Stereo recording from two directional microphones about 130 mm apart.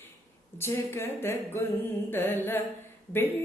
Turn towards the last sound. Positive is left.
turn(degrees=15)  # may be behind; listen again after turning